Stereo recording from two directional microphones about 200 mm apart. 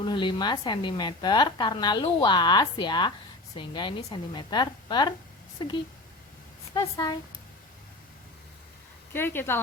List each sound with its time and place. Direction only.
0.0 s a woman's voice: 25° left (ahead or behind)
6.7 s speech: 15° left (ahead or behind)
9.1 s speech: 10° left (ahead or behind)